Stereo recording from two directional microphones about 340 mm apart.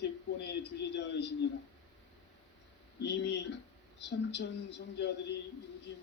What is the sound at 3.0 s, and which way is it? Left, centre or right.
A man's voice, left.